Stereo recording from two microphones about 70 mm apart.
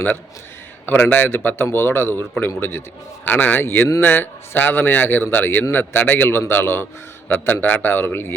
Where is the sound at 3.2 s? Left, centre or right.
Left.